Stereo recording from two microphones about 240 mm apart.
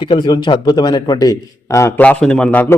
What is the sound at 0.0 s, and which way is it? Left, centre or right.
A man's voice, centre.